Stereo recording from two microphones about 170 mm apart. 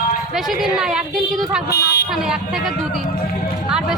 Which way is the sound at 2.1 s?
Centre (ahead or behind).